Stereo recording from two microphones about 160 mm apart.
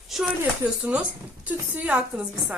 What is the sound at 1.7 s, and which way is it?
Speech, 10° right (ahead or behind).